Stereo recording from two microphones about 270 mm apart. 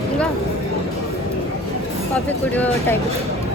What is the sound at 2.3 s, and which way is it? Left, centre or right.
Speech, centre.